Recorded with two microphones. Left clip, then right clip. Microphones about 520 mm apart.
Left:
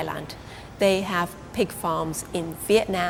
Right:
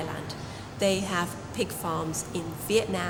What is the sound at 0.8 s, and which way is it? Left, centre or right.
A woman's voice, left.